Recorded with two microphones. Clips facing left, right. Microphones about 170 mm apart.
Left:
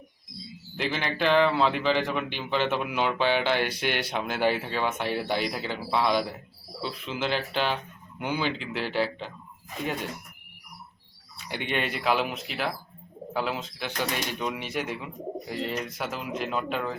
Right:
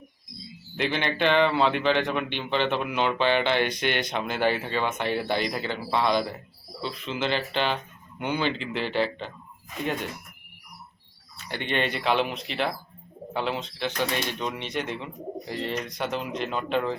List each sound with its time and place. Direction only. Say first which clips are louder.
0.8 s speech: right 2 dB; centre (ahead or behind)
11.4 s speech: right 2 dB; 10° left (ahead or behind)